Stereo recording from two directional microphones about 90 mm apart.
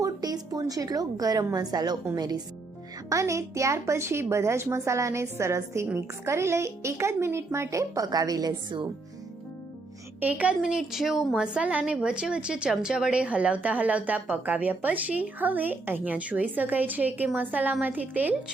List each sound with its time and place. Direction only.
0.0 s a woman's voice: 45° right (ahead or behind)
3.1 s a woman's voice: 35° right (ahead or behind)
10.2 s a woman's voice: 15° right (ahead or behind)